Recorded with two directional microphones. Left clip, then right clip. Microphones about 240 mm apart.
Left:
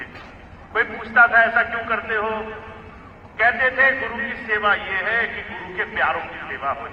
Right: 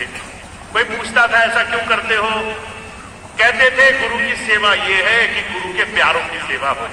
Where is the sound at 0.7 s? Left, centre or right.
Right.